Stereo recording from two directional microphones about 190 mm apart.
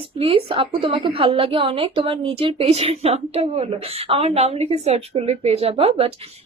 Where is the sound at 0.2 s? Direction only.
30° right (ahead or behind).